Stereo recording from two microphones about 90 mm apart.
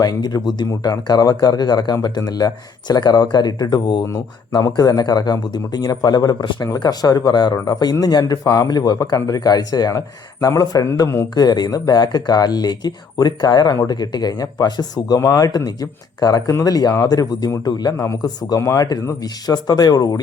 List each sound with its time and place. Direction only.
0.0 s speech: 50° left (ahead or behind)
4.1 s speech: 45° left (ahead or behind)
11.3 s speech: 50° left (ahead or behind)
18.6 s speech: 35° left (ahead or behind)
19.2 s speech: 45° left (ahead or behind)